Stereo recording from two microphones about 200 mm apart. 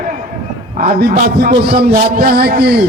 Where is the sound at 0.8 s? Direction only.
50° right (ahead or behind).